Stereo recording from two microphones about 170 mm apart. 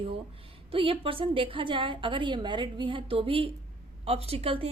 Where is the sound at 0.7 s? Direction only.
30° right (ahead or behind).